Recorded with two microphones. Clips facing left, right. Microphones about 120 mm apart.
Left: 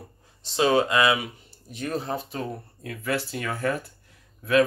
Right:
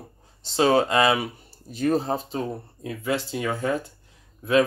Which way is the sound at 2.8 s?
20° right (ahead or behind).